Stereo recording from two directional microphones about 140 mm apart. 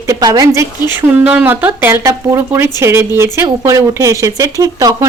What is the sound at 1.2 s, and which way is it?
A woman's voice, 10° right (ahead or behind).